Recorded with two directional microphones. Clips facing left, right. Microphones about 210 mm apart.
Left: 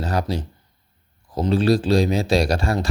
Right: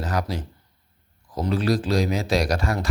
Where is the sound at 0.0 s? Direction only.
30° left (ahead or behind).